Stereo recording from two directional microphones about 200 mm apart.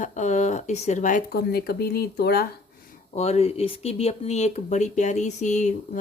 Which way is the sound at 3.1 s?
30° left (ahead or behind).